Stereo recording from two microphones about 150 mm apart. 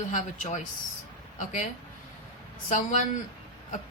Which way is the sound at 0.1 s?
55° left (ahead or behind).